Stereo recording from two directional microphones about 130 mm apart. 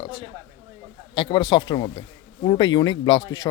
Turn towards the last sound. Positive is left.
turn(degrees=30)  # may be behind; listen again after turning